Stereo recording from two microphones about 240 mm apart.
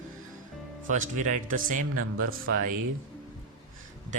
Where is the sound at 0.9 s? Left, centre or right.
Right.